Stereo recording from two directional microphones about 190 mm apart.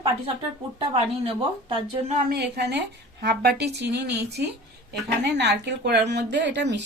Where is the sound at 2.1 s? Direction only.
60° right (ahead or behind).